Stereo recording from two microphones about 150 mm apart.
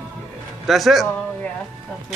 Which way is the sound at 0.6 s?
Centre (ahead or behind).